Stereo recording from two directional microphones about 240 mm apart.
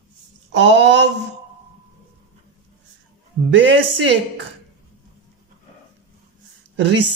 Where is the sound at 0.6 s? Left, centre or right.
Right.